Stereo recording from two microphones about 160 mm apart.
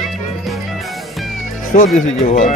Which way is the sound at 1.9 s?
50° left (ahead or behind).